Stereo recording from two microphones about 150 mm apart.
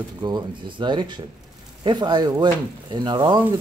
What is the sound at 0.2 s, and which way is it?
Speech, 30° right (ahead or behind).